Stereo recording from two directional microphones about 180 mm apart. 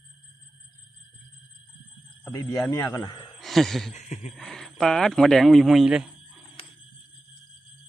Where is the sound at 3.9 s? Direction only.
40° left (ahead or behind).